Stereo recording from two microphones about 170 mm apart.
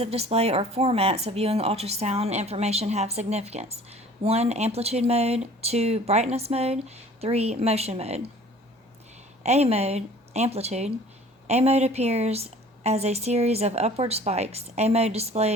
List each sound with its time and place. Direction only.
0.0 s speech: 35° right (ahead or behind)
9.4 s speech: 40° right (ahead or behind)